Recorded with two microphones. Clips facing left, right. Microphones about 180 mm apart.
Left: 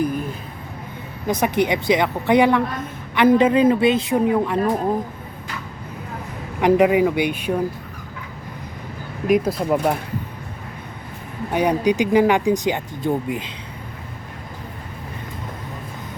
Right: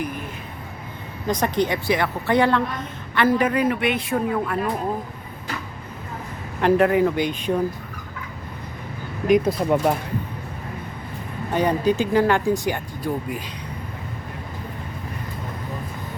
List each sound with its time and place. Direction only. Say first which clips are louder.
1.3 s a man's voice: left 2 dB; 10° left (ahead or behind)
6.6 s speech: left 2 dB; 15° left (ahead or behind)
9.2 s speech: even; 5° left (ahead or behind)
11.5 s speech: left 2 dB; 15° left (ahead or behind)